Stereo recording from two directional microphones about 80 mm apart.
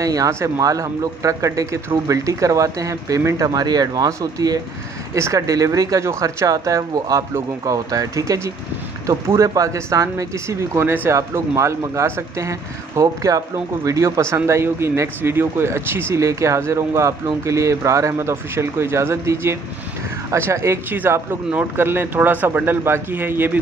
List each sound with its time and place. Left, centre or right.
0.0 s speech: right